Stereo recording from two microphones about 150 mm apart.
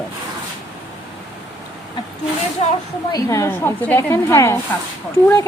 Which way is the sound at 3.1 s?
20° left (ahead or behind).